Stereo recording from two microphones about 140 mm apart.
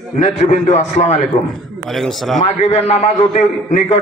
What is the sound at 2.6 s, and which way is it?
A man's voice, 50° left (ahead or behind).